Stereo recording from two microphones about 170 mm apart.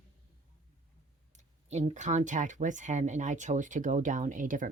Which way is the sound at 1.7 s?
40° right (ahead or behind).